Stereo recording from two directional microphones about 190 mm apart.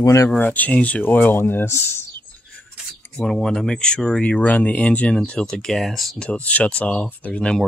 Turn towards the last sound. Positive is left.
turn(degrees=5)  # may be behind; listen again after turning